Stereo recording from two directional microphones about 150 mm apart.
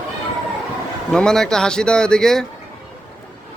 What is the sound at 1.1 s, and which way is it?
Speech, 5° left (ahead or behind).